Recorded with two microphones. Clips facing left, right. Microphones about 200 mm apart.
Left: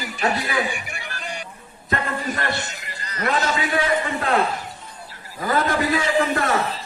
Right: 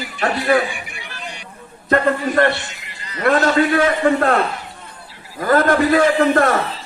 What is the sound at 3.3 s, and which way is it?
A man's voice, 50° right (ahead or behind).